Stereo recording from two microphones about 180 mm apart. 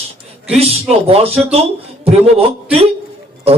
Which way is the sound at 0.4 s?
35° right (ahead or behind).